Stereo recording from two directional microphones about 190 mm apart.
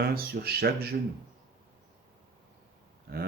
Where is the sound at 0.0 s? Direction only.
55° right (ahead or behind).